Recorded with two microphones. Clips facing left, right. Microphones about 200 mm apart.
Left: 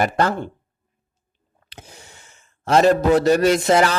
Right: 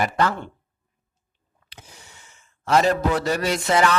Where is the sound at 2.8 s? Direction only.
45° left (ahead or behind).